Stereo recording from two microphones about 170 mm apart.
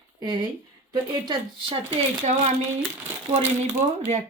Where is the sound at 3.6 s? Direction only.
45° right (ahead or behind).